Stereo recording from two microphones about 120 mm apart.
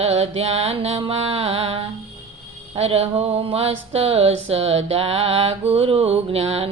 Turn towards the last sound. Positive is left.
turn(degrees=-60)  # may be behind; listen again after turning